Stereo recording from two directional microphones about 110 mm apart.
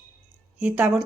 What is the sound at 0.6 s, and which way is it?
Speech, 10° right (ahead or behind).